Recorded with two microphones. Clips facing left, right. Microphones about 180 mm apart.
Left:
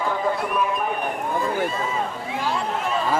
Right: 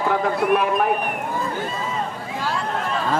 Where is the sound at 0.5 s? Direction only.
65° right (ahead or behind).